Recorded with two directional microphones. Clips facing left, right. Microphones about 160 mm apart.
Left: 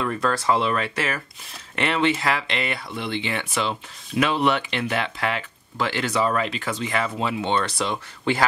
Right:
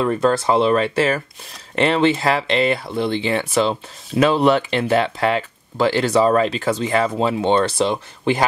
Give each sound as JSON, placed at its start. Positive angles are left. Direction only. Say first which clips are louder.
{"t": 0.0, "sound": "speech", "louder": "right 6 dB", "side_deg": -25}